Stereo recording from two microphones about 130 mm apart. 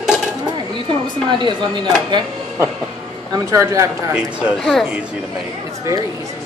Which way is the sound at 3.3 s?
25° right (ahead or behind).